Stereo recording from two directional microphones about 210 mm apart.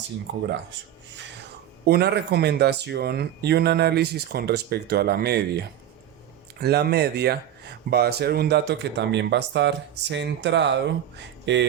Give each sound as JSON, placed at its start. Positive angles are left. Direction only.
{"t": 1.8, "sound": "speech", "side_deg": -50}